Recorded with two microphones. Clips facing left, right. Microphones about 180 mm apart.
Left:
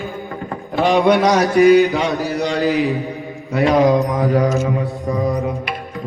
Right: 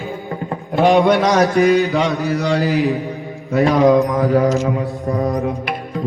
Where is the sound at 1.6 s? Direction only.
15° left (ahead or behind).